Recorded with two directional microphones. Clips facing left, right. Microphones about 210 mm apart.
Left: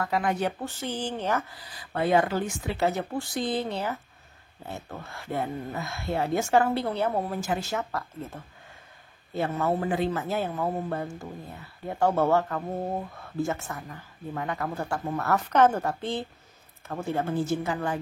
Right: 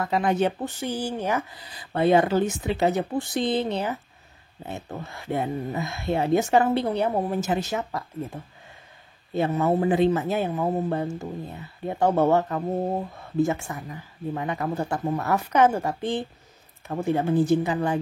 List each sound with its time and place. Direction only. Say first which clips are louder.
0.0 s speech: right 4 dB; 25° right (ahead or behind)
1.7 s speech: right 4 dB; 25° right (ahead or behind)